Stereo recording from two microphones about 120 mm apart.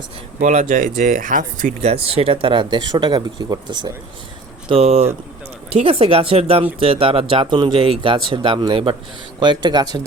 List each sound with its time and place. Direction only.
0.4 s speech: 90° right; by 3.9 s 35° right (ahead or behind)
4.7 s speech: 60° right (ahead or behind); by 10.0 s 35° right (ahead or behind)